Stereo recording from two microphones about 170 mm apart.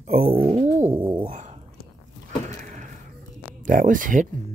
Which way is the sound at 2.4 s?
45° right (ahead or behind).